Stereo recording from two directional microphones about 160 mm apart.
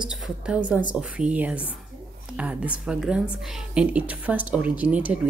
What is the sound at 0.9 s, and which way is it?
A woman's voice, 5° right (ahead or behind).